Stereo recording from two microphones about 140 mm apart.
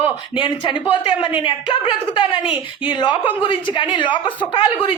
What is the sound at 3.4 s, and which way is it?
Speech, 35° left (ahead or behind).